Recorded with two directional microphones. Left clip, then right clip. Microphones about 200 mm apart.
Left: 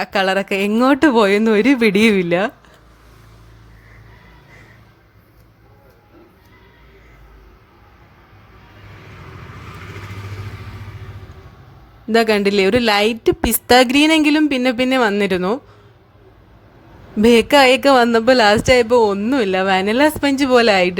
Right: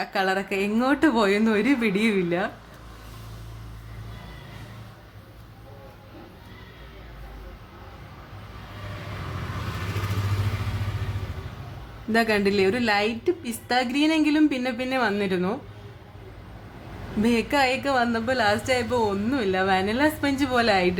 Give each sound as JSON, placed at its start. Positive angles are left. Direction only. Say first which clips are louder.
{"t": 0.0, "sound": "speech", "louder": "left 7 dB", "side_deg": 50}
{"t": 12.1, "sound": "speech", "louder": "left 7 dB", "side_deg": 45}
{"t": 17.2, "sound": "speech", "louder": "left 12 dB", "side_deg": 50}